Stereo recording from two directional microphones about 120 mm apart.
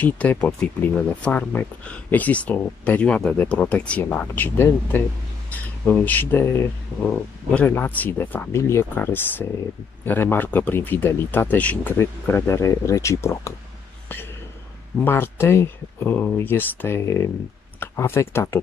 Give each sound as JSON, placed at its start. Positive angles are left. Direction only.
{"t": 0.0, "sound": "speech", "side_deg": 10}
{"t": 15.0, "sound": "speech", "side_deg": 20}